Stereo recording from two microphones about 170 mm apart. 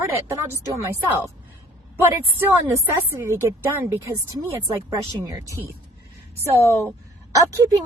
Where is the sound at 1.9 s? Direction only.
15° right (ahead or behind).